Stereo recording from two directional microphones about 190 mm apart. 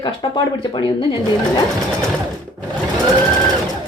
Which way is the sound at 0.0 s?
25° left (ahead or behind).